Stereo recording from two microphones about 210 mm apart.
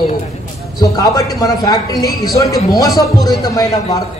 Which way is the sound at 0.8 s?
15° left (ahead or behind).